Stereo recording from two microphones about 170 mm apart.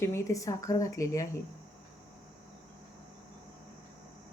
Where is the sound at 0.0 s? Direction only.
15° left (ahead or behind).